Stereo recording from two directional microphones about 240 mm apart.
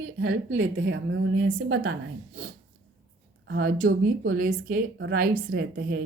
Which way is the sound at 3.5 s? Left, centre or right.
Right.